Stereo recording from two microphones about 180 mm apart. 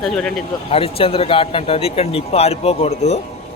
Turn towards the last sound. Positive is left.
turn(degrees=35)  # may be behind; listen again after turning